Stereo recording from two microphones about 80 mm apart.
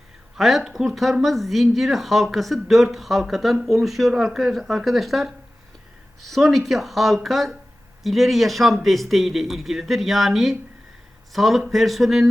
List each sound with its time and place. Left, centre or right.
0.3 s speech: centre